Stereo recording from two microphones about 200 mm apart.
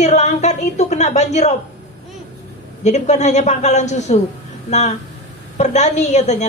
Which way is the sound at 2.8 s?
35° left (ahead or behind).